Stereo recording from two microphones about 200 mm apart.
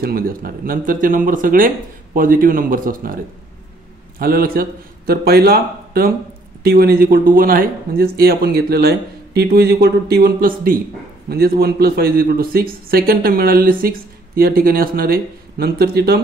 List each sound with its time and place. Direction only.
0.0 s a man's voice: 45° right (ahead or behind)
4.2 s a man's voice: 45° right (ahead or behind)